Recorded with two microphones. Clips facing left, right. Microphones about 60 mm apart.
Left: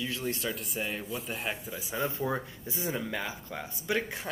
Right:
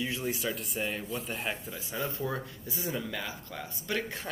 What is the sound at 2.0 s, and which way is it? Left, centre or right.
A man's voice, left.